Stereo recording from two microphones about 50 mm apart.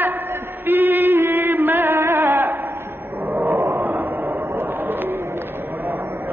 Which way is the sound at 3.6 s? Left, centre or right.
Right.